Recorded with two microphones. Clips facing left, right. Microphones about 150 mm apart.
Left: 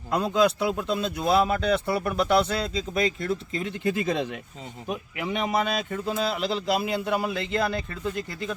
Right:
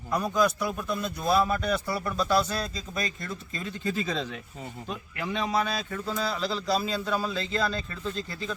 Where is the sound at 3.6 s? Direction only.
60° left (ahead or behind).